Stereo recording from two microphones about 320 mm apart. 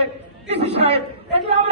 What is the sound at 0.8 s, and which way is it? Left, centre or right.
Speech, centre.